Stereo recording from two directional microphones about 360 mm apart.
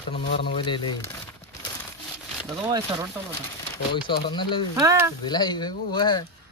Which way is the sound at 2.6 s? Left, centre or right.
Centre.